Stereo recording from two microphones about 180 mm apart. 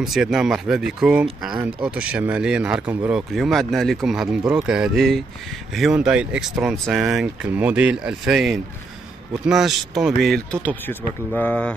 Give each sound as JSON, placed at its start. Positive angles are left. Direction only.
{"t": 0.0, "sound": "speech", "side_deg": 0}